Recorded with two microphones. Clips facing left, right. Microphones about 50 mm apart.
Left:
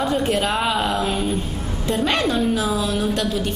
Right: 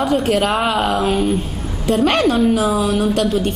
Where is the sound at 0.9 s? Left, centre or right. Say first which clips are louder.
Right 5 dB; right.